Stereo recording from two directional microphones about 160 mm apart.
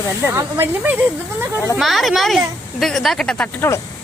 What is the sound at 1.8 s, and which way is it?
Speech, centre (ahead or behind).